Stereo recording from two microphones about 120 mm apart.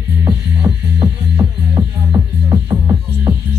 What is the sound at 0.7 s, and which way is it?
Music, centre (ahead or behind).